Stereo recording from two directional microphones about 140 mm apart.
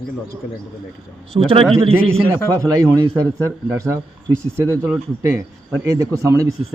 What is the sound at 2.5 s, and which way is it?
Speech, 20° right (ahead or behind).